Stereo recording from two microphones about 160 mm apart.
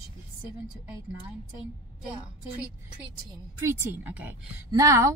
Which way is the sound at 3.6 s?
15° right (ahead or behind).